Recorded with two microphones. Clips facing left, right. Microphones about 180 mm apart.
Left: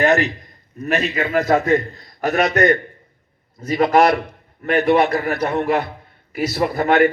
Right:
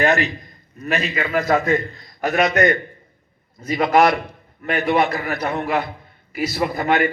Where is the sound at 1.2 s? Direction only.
45° left (ahead or behind).